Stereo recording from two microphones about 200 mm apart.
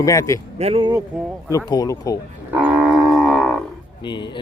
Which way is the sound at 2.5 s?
5° right (ahead or behind).